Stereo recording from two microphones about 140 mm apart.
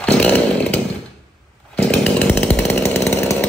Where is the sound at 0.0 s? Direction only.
10° left (ahead or behind).